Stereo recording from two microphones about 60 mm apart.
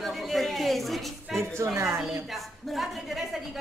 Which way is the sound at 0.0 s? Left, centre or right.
Centre.